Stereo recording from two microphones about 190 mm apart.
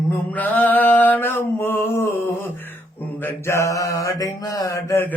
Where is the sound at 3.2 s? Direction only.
15° left (ahead or behind).